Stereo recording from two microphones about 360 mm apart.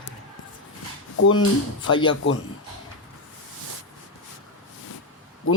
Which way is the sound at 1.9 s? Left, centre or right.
Centre.